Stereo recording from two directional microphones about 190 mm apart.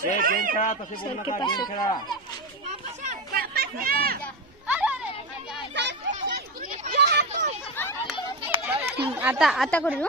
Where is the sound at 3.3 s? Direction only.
50° right (ahead or behind).